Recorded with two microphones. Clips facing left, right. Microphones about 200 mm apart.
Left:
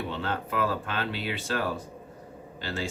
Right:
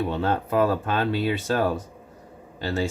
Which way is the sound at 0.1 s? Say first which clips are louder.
Right 7 dB; 40° right (ahead or behind).